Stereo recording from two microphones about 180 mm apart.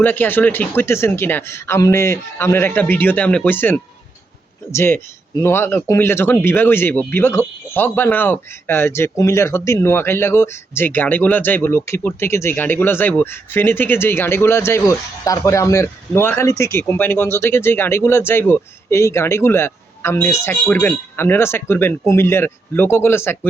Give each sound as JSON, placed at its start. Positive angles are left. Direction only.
{"t": 0.0, "sound": "speech", "side_deg": 10}